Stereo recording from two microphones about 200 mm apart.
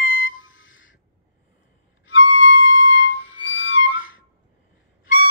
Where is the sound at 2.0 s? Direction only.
65° left (ahead or behind).